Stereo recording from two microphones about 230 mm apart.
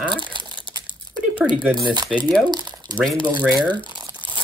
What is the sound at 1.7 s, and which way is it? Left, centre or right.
Speech, centre.